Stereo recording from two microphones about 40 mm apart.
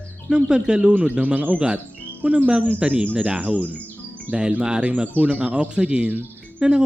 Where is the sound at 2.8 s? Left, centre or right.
Right.